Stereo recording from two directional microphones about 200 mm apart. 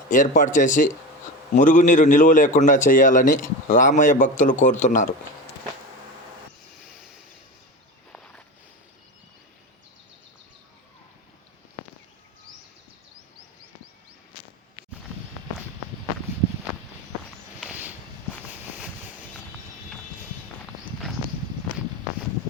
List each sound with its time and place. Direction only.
0.1 s a man's voice: 40° left (ahead or behind)
8.1 s walk: 5° left (ahead or behind)
17.6 s a sound: 5° right (ahead or behind)